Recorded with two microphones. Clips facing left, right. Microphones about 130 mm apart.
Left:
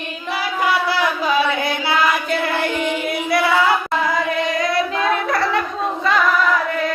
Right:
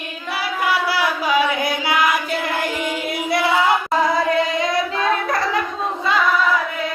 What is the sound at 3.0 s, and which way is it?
Singing, 25° right (ahead or behind).